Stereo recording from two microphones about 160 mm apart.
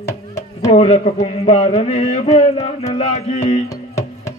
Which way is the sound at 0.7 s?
40° left (ahead or behind).